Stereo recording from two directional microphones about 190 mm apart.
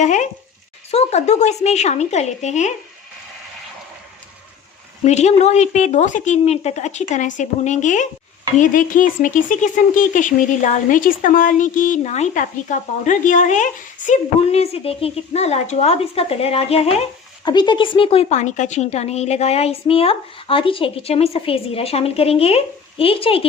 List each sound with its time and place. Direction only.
0.0 s speech: 40° left (ahead or behind)
5.0 s speech: 35° left (ahead or behind)